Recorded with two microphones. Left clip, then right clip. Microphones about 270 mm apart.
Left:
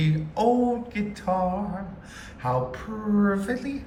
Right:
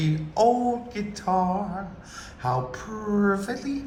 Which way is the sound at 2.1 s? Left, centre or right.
Centre.